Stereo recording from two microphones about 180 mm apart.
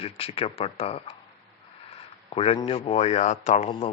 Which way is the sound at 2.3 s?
35° left (ahead or behind).